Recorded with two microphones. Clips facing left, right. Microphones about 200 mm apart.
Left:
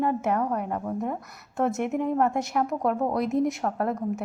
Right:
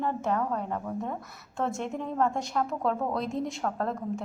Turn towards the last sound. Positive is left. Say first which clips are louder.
# left 4 dB
turn(degrees=20)  # may be behind; listen again after turning